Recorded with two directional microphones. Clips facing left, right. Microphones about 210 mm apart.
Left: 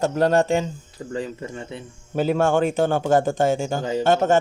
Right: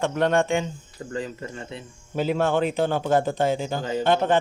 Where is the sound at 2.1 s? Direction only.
45° left (ahead or behind).